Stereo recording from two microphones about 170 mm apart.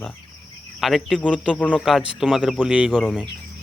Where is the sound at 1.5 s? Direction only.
5° left (ahead or behind).